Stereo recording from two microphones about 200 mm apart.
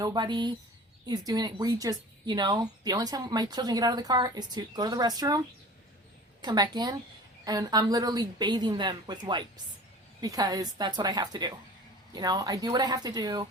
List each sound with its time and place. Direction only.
0.0 s speech: 20° right (ahead or behind)
6.4 s speech: 20° right (ahead or behind)